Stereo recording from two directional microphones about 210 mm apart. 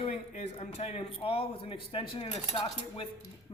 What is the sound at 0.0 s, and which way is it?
Speech, 30° left (ahead or behind).